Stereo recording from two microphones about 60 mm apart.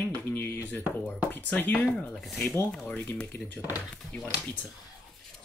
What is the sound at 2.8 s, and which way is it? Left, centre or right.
Speech, left.